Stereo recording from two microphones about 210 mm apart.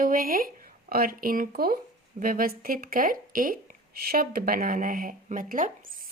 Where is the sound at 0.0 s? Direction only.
40° right (ahead or behind).